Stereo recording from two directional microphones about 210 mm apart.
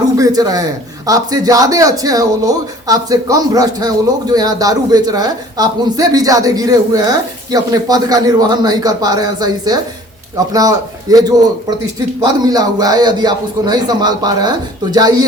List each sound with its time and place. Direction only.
0.2 s a man's voice: 15° right (ahead or behind)